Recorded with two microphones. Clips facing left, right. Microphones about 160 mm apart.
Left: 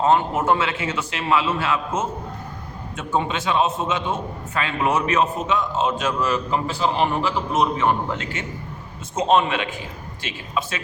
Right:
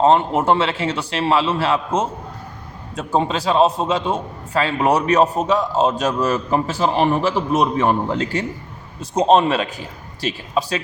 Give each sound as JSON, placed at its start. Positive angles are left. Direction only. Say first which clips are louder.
{"t": 0.0, "sound": "a man's voice", "louder": "right 4 dB", "side_deg": -30}